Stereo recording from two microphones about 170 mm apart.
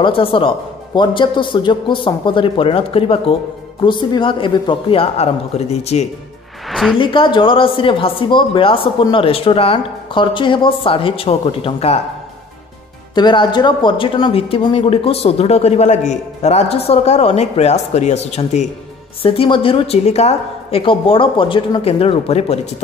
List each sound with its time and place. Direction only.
0.0 s a man's voice: 30° left (ahead or behind)
6.7 s a woman's voice: centre (ahead or behind)
7.0 s speech: 30° left (ahead or behind)
13.1 s speech: 25° left (ahead or behind)